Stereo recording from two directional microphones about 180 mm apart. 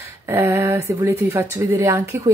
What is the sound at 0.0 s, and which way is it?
Speech, 15° right (ahead or behind).